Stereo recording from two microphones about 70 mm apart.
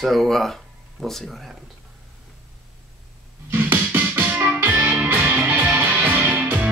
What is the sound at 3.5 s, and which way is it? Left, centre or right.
Music, right.